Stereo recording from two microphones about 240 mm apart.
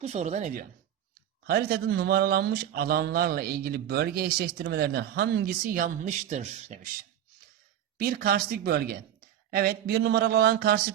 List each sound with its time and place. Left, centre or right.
0.0 s a man's voice: right
7.9 s a man's voice: right